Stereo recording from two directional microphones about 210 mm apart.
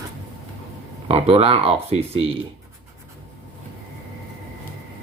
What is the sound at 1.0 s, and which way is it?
Speech, 30° right (ahead or behind).